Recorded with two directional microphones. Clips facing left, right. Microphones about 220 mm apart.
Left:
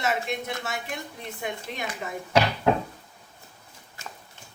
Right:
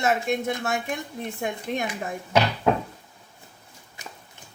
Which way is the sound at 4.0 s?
15° right (ahead or behind).